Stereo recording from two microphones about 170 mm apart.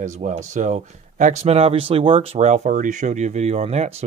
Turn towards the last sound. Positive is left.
turn(degrees=-40)  # may be behind; listen again after turning